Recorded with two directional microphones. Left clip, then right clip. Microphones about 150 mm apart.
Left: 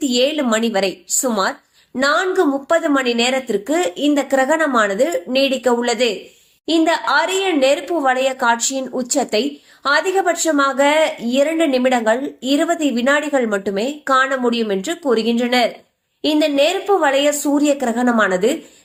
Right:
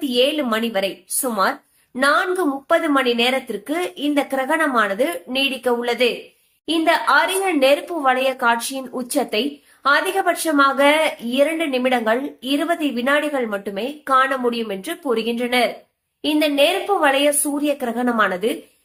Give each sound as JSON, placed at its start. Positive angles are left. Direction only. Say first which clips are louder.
{"t": 0.1, "sound": "a woman's voice", "louder": "even", "side_deg": 40}